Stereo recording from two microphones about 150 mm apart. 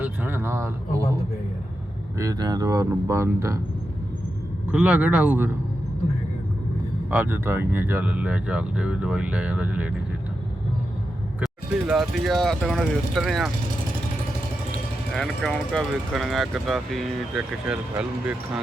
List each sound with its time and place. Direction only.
0.0 s a sound: 15° right (ahead or behind)
2.1 s speech: 25° right (ahead or behind)
4.7 s speech: 10° right (ahead or behind)
7.1 s speech: 10° right (ahead or behind)
11.3 s speech: 5° right (ahead or behind)
15.1 s speech: 5° left (ahead or behind)